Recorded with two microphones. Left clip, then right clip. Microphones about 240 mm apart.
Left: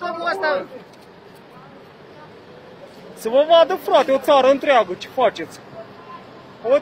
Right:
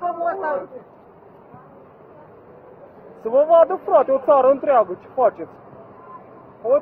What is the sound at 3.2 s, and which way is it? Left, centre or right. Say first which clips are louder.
Speech: even; left.